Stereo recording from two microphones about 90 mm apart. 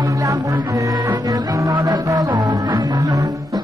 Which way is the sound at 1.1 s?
50° right (ahead or behind).